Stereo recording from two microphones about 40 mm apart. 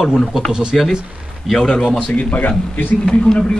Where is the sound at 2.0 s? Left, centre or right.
Left.